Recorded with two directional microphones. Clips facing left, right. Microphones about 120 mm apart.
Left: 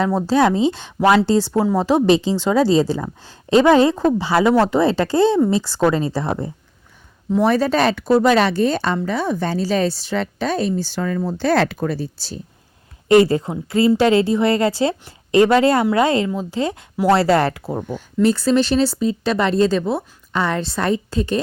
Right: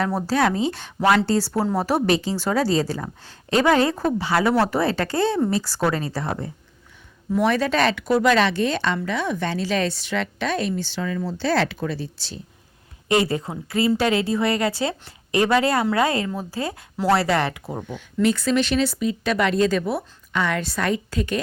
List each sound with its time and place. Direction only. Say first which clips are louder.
0.0 s a woman's voice: left 5 dB; 25° left (ahead or behind); by 12.4 s 40° left (ahead or behind)
13.1 s a woman's voice: left 8 dB; 30° left (ahead or behind)